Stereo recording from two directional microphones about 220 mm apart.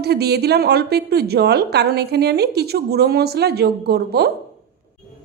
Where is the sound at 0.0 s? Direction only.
45° right (ahead or behind).